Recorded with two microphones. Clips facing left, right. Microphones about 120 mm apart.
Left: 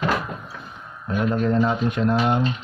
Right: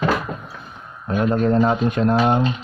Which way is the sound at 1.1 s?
30° right (ahead or behind).